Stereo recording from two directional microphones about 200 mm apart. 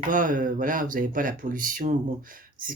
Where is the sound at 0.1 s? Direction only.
40° right (ahead or behind).